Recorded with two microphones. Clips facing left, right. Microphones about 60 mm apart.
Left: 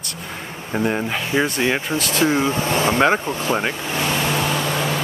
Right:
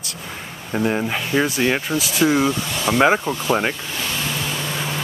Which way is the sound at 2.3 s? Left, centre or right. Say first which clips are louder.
Left 1 dB; left.